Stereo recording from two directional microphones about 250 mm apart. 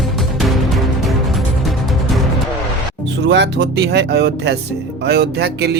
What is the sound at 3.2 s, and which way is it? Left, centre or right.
Speech, right.